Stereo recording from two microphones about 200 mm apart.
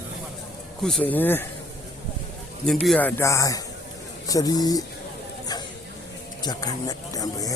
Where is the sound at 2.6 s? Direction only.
Centre (ahead or behind); by 4.8 s 20° left (ahead or behind).